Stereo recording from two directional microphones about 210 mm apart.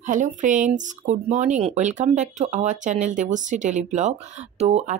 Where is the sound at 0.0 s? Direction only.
35° right (ahead or behind).